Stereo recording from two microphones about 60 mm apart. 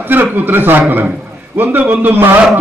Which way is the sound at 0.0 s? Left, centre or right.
Right.